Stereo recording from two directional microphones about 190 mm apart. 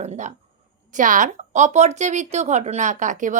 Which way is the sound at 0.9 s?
45° right (ahead or behind).